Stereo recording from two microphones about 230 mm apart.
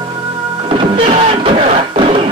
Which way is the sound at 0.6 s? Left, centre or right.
Right.